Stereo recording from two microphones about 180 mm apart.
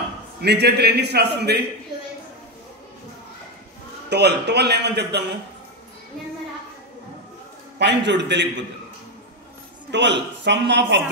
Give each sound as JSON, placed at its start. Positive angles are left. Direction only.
{"t": 0.4, "sound": "a man's voice", "side_deg": -65}
{"t": 4.1, "sound": "a man's voice", "side_deg": -70}
{"t": 8.0, "sound": "a man's voice", "side_deg": -75}
{"t": 9.8, "sound": "a man's voice", "side_deg": -75}